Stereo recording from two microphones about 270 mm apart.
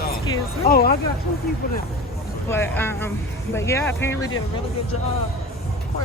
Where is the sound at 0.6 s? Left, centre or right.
Left.